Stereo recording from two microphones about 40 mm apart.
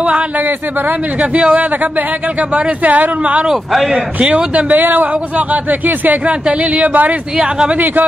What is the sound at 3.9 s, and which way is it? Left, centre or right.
Speech, right.